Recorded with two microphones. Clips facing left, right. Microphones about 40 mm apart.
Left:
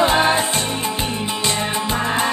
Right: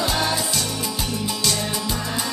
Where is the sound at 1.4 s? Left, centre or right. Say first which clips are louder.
Left 5 dB; left.